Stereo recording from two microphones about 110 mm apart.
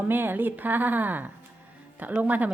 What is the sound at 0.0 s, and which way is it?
A woman's voice, 20° right (ahead or behind).